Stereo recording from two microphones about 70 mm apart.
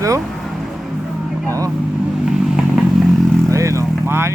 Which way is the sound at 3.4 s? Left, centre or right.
Right.